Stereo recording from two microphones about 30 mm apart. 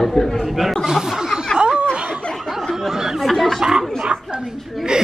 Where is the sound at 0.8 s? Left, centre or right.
Centre.